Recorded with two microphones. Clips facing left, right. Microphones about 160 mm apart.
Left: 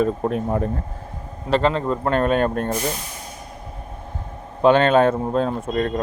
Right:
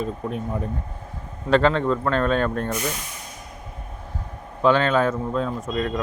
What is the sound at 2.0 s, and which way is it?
Speech, 15° left (ahead or behind).